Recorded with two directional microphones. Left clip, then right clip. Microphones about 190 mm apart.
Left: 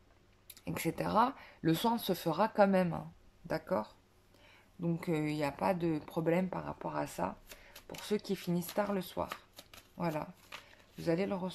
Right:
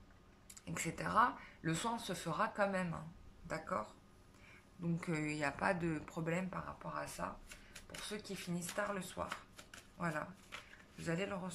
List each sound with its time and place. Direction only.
0.7 s a woman's voice: 25° left (ahead or behind)
4.8 s a woman's voice: 20° left (ahead or behind)